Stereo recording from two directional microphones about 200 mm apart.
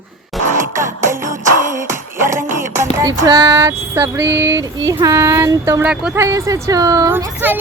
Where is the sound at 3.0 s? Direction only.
20° right (ahead or behind).